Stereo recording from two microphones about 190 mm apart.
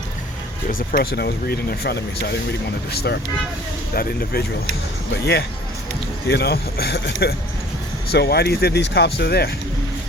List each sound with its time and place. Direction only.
0.7 s speech: 45° left (ahead or behind)